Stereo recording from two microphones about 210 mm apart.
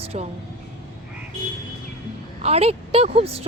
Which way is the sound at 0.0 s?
30° right (ahead or behind).